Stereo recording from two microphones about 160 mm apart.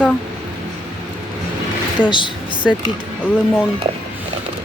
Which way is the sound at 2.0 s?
30° left (ahead or behind).